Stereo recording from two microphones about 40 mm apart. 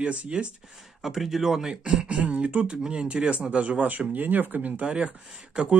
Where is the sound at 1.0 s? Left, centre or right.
Centre.